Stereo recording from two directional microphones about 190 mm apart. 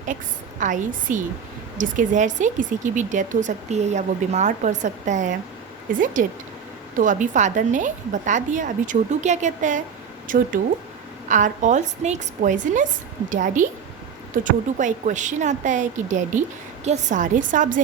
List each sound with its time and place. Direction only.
0.6 s speech: 40° right (ahead or behind)
6.9 s speech: 45° right (ahead or behind)